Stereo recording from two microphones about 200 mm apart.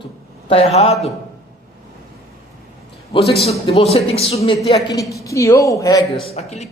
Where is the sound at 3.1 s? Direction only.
25° left (ahead or behind).